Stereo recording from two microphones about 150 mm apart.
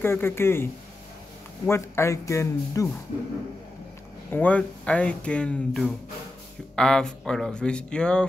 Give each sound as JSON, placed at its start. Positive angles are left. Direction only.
{"t": 0.0, "sound": "speech", "side_deg": 15}
{"t": 1.7, "sound": "speech", "side_deg": 20}
{"t": 4.3, "sound": "speech", "side_deg": 10}